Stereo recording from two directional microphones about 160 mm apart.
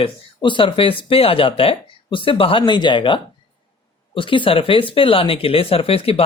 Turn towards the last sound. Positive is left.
turn(degrees=35)  # may be behind; listen again after turning